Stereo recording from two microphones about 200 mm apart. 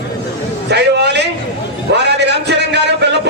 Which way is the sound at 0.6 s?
55° right (ahead or behind).